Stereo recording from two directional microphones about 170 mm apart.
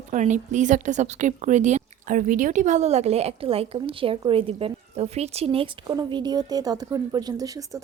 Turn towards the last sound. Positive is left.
turn(degrees=-20)  # may be behind; listen again after turning